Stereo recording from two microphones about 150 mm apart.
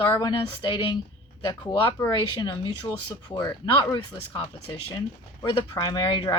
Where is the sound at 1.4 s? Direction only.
35° left (ahead or behind).